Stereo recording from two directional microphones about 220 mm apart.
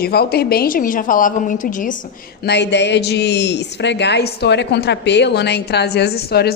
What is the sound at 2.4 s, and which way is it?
A woman's voice, 50° left (ahead or behind).